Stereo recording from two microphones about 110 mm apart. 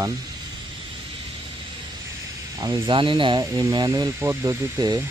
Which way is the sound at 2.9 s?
50° right (ahead or behind).